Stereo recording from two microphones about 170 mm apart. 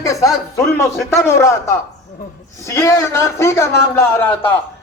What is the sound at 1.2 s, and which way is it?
A man's voice, 15° left (ahead or behind).